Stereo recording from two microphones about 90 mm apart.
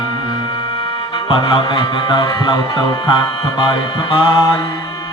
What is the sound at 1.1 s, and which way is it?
Music, 75° left (ahead or behind).